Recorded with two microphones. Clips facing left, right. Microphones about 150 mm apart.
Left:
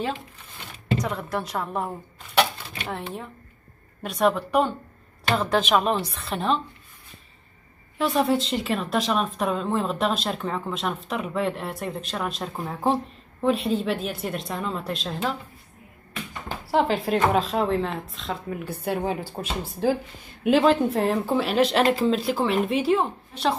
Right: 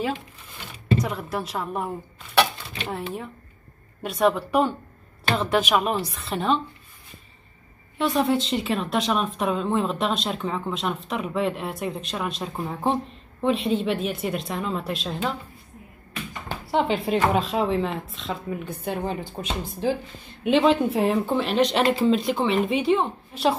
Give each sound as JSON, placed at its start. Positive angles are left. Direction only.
{"t": 1.0, "sound": "speech", "side_deg": -5}
{"t": 4.0, "sound": "speech", "side_deg": 0}
{"t": 8.0, "sound": "speech", "side_deg": 0}
{"t": 16.6, "sound": "speech", "side_deg": 0}